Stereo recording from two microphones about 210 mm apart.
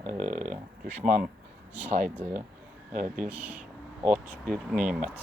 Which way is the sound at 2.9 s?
35° right (ahead or behind).